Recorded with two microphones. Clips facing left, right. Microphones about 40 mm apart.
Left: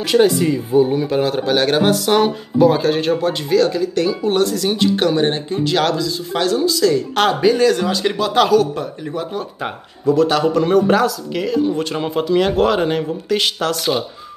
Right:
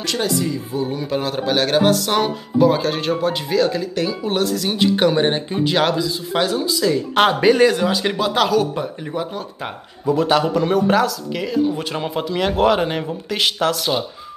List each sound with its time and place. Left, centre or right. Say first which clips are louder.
0.0 s speech: left 7 dB; centre
1.0 s speech: left 4 dB; centre
7.3 s speech: left 1 dB; right
7.7 s speech: left 1 dB; centre
10.0 s speech: left 2 dB; centre